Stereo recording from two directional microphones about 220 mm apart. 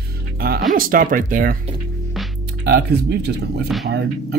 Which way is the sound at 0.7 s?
40° right (ahead or behind).